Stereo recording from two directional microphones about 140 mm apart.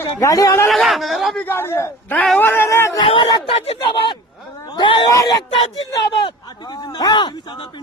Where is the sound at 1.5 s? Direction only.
15° left (ahead or behind).